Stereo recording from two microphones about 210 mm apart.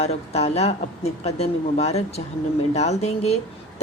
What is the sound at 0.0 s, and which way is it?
A woman's voice, 30° left (ahead or behind).